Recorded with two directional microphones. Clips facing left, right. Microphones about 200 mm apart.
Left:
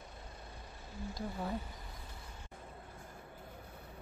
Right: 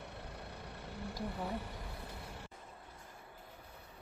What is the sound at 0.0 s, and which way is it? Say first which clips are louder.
Vehicle: right 4 dB; 70° right (ahead or behind).